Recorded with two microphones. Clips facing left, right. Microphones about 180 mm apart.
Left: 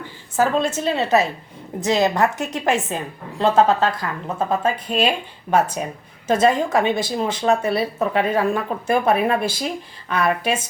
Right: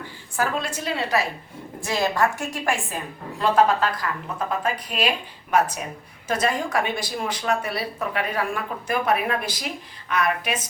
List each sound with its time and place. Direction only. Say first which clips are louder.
0.3 s a woman's voice: left 7 dB; 25° left (ahead or behind)